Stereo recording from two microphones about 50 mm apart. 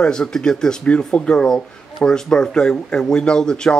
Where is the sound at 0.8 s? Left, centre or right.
Left.